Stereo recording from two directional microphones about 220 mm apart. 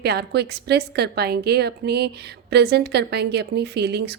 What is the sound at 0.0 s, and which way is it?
Speech, 45° right (ahead or behind).